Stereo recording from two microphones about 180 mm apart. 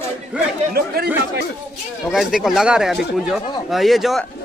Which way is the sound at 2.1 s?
Centre (ahead or behind).